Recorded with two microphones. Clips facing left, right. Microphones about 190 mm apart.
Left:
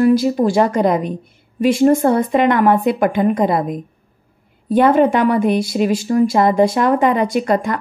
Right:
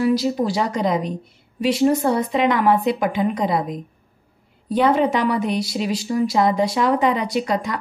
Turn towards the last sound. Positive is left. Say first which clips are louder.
# left 5 dB
turn(degrees=50)  # may be behind; listen again after turning